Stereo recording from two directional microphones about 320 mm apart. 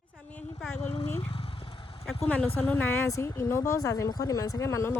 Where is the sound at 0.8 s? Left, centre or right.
Centre.